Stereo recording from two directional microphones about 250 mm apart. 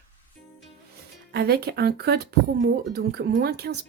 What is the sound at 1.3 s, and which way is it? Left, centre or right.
Speech, right.